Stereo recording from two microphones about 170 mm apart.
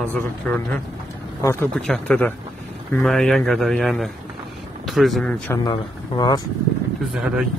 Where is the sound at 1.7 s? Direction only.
5° left (ahead or behind).